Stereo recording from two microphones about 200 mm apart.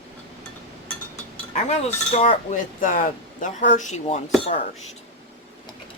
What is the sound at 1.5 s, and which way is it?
Speech, 30° left (ahead or behind).